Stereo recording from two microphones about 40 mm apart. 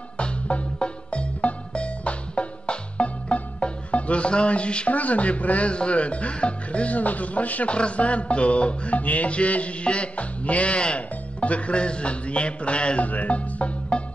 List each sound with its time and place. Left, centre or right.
0.2 s music: left
7.0 s music: left